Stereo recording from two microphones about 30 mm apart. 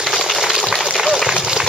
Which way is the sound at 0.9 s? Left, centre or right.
Centre.